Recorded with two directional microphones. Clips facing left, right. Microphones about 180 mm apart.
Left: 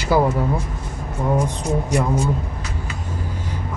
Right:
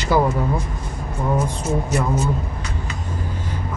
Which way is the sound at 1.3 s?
15° left (ahead or behind).